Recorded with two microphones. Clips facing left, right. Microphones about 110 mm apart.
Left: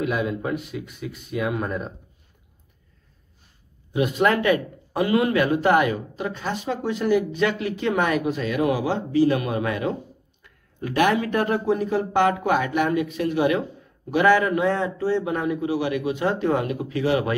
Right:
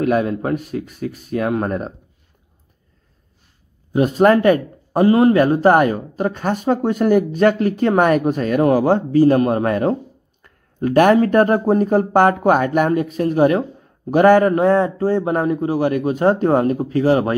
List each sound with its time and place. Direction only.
0.0 s speech: 50° right (ahead or behind)
3.9 s speech: 40° right (ahead or behind)